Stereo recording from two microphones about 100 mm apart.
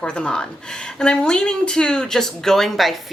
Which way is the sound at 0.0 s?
10° left (ahead or behind).